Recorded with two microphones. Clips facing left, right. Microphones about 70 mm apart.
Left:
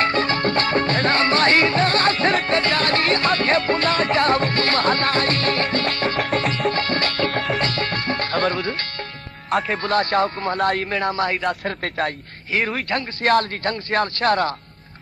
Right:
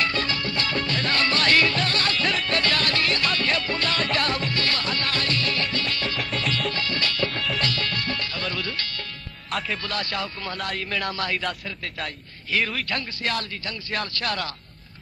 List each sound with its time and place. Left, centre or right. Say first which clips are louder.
0.0 s music: left 7 dB; left
7.2 s music: left 6 dB; left
7.6 s music: left 4 dB; left
9.5 s speech: left 8 dB; left